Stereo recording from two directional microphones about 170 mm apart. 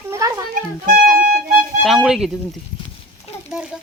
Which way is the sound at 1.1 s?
55° right (ahead or behind).